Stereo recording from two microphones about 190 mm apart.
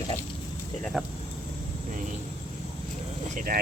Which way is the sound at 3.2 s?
45° right (ahead or behind).